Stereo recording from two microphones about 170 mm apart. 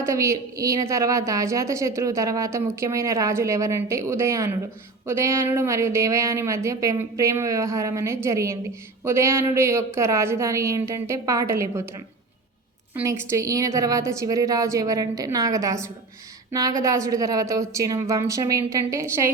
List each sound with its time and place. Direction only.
0.0 s a woman's voice: 20° right (ahead or behind)
12.9 s a woman's voice: 15° right (ahead or behind)